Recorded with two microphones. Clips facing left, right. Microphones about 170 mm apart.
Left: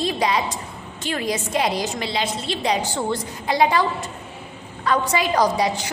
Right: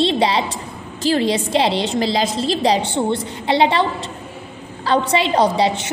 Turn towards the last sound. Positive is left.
turn(degrees=-25)  # may be behind; listen again after turning